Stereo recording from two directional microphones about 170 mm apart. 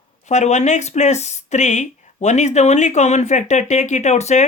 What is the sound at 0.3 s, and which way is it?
Speech, 45° left (ahead or behind).